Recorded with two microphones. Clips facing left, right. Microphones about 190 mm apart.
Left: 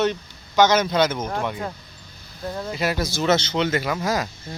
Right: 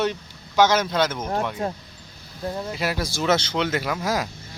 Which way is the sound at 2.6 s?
5° right (ahead or behind).